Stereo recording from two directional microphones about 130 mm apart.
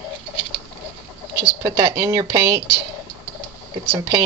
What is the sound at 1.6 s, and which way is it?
Speech, 30° right (ahead or behind).